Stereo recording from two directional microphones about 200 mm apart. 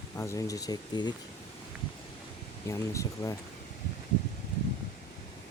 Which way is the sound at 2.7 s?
15° left (ahead or behind).